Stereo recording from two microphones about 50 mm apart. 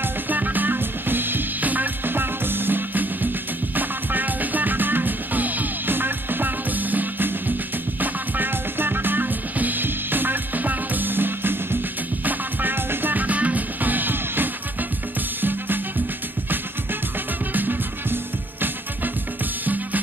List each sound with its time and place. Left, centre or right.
0.0 s music: right
17.5 s music: right